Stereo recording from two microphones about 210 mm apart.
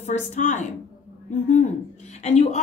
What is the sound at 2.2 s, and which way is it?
Speech, 30° left (ahead or behind).